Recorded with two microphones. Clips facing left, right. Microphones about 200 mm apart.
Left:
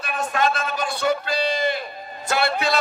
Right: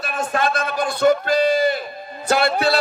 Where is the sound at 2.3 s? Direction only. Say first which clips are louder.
Right 4 dB; 40° right (ahead or behind).